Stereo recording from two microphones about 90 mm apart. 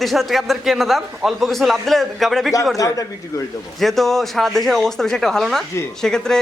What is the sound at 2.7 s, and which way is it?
Speech, 40° left (ahead or behind).